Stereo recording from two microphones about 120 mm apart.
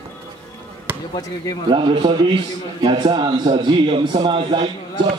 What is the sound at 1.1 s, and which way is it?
Speech, 30° left (ahead or behind).